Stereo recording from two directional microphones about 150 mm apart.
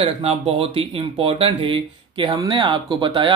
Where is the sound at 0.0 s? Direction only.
40° right (ahead or behind).